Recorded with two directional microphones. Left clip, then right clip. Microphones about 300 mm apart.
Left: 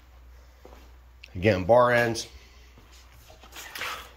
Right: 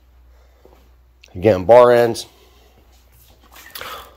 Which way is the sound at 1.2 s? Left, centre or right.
Centre.